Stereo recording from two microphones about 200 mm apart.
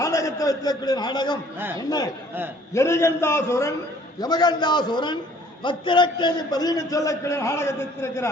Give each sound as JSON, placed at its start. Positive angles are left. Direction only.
{"t": 0.0, "sound": "a man's voice", "side_deg": 15}
{"t": 2.7, "sound": "a man's voice", "side_deg": 15}